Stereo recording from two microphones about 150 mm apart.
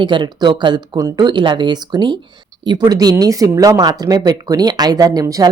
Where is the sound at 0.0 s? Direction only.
30° right (ahead or behind).